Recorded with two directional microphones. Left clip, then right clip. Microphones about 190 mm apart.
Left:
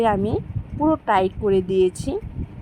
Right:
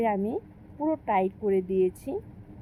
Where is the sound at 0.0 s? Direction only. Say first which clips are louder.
Left 7 dB; 40° left (ahead or behind).